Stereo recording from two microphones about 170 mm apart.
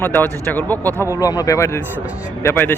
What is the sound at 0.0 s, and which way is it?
Speech, 10° left (ahead or behind).